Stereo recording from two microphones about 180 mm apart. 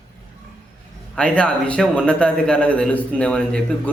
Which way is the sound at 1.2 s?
5° left (ahead or behind).